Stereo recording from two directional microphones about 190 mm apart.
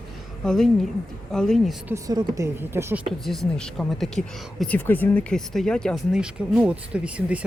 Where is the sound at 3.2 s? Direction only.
Centre (ahead or behind).